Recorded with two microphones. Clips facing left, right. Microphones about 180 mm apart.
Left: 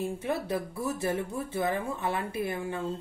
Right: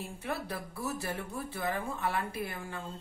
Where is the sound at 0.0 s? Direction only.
20° left (ahead or behind).